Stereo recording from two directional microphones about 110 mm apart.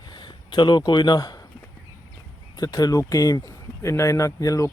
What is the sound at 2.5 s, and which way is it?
Speech, 35° left (ahead or behind).